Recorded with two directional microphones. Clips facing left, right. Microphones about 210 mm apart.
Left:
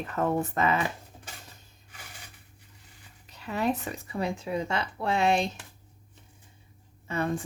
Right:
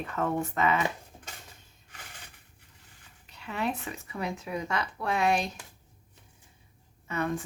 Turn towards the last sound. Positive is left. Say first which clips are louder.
# left 1 dB
turn(degrees=30)  # may be behind; listen again after turning